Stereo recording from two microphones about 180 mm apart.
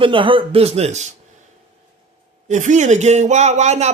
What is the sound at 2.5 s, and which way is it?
A man's voice, 40° right (ahead or behind).